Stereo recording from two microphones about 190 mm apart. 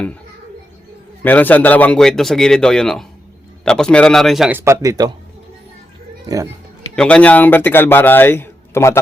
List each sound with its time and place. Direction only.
1.2 s a man's voice: 10° left (ahead or behind); by 5.1 s 20° right (ahead or behind)
6.2 s speech: 15° right (ahead or behind)
6.9 s speech: 5° left (ahead or behind)